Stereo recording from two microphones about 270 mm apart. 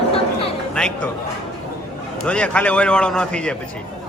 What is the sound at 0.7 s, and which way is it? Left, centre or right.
Speech, centre.